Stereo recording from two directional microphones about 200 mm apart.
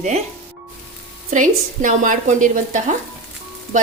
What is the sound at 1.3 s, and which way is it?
Speech, 40° right (ahead or behind).